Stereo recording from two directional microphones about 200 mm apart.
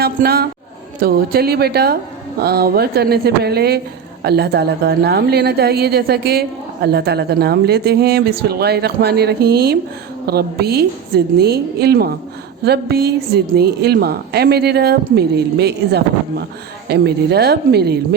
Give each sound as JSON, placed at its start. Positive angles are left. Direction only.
{"t": 0.0, "sound": "a woman's voice", "side_deg": -50}